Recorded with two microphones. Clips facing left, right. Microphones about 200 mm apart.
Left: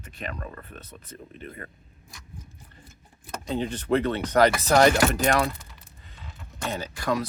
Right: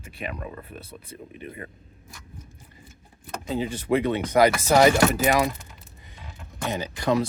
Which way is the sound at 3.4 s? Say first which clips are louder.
Right 1 dB; 5° right (ahead or behind).